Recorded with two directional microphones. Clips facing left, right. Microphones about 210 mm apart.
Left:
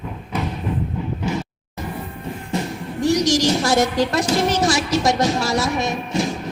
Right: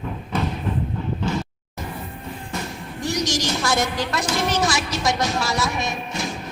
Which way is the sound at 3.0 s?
35° left (ahead or behind).